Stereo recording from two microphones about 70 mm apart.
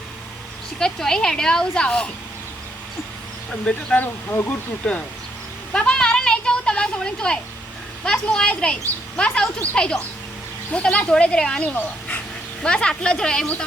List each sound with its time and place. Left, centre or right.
0.8 s speech: centre
3.9 s speech: left
4.8 s speech: centre
5.7 s a sound: centre
8.0 s speech: centre